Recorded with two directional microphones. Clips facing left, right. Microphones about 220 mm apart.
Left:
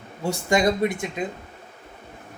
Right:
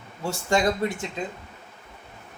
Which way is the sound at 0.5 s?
15° left (ahead or behind).